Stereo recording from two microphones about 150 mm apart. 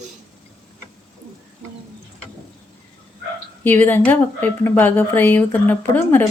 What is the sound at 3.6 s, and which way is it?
Speech, 15° left (ahead or behind).